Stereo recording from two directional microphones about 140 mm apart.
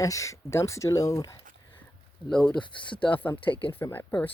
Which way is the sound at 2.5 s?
35° left (ahead or behind).